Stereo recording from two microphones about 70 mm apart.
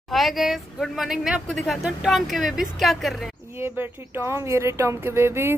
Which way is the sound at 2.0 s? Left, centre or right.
Centre.